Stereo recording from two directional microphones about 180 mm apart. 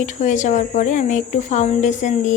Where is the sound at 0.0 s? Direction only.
40° left (ahead or behind).